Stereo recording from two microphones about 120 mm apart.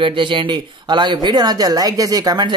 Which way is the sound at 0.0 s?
45° right (ahead or behind).